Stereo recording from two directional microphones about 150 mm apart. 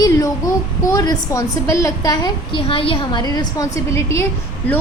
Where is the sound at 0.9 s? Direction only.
20° left (ahead or behind).